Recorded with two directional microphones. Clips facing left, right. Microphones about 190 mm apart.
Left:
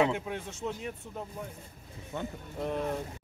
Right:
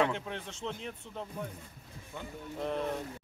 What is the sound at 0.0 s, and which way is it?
Speech, 10° left (ahead or behind).